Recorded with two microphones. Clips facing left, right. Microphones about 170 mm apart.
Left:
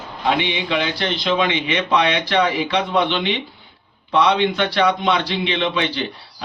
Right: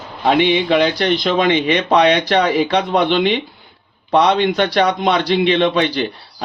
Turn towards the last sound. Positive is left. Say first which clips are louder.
# right 5 dB
turn(degrees=-40)  # may be behind; listen again after turning